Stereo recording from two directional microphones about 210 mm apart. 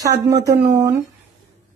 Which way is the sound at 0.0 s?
15° right (ahead or behind).